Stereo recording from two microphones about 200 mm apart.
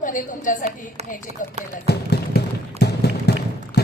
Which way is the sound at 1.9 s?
55° left (ahead or behind).